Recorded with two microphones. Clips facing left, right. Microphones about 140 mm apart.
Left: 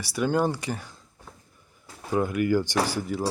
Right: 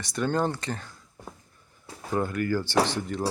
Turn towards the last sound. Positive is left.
turn(degrees=10)  # may be behind; listen again after turning